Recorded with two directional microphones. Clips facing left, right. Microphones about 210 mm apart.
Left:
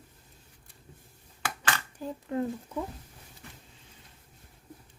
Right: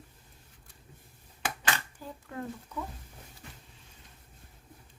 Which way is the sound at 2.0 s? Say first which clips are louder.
Left 9 dB; 20° left (ahead or behind).